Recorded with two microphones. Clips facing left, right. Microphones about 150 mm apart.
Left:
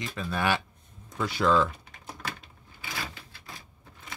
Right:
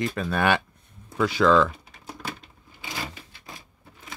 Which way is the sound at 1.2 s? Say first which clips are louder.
Right 5 dB; 90° right.